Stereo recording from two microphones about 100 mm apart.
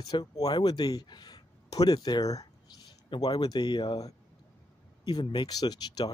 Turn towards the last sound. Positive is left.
turn(degrees=45)  # may be behind; listen again after turning